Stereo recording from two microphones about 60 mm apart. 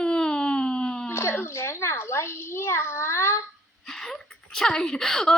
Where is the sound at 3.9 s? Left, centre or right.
Centre.